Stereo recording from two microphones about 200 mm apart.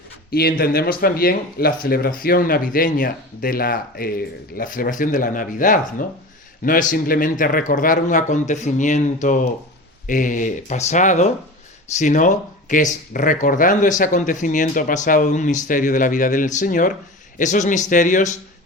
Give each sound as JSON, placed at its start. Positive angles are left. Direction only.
{"t": 0.3, "sound": "speech", "side_deg": 50}